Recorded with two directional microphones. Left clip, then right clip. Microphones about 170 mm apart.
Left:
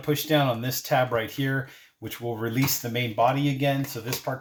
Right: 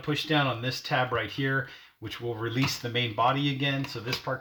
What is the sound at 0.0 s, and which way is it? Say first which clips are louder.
Speech: left 3 dB; 35° left (ahead or behind).